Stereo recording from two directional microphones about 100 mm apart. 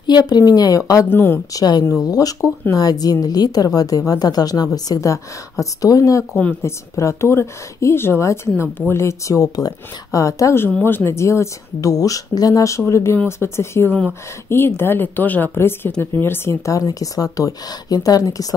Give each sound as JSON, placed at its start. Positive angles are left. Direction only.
{"t": 0.0, "sound": "a woman's voice", "side_deg": 45}
{"t": 1.0, "sound": "speech", "side_deg": 25}
{"t": 1.5, "sound": "a woman's voice", "side_deg": 40}